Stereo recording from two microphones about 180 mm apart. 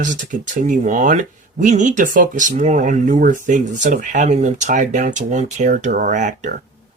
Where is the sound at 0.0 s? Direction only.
45° right (ahead or behind).